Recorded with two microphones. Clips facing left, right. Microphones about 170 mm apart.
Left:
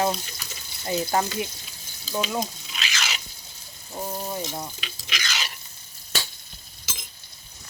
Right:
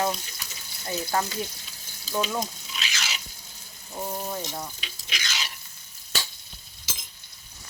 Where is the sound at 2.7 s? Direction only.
90° left.